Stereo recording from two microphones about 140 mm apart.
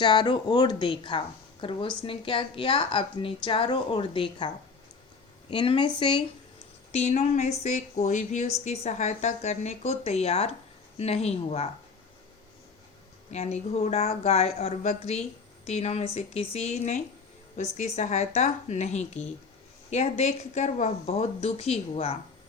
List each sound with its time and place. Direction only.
0.0 s a woman's voice: 35° left (ahead or behind)
6.9 s speech: 50° left (ahead or behind)
13.3 s speech: 50° left (ahead or behind)